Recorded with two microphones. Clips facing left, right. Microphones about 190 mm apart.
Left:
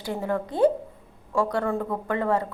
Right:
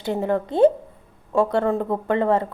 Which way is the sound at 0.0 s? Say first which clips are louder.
Right 5 dB; 25° right (ahead or behind).